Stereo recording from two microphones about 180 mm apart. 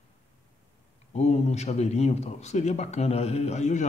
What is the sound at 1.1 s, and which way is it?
A man's voice, 35° left (ahead or behind).